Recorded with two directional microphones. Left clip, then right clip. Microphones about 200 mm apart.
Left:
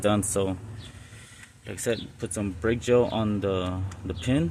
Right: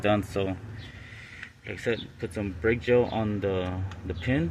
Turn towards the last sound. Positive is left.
turn(degrees=15)  # may be behind; listen again after turning